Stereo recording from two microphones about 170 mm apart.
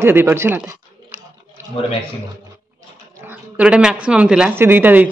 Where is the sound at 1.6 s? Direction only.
15° right (ahead or behind).